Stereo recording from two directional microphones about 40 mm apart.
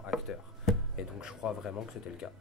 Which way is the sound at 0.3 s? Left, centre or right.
Centre.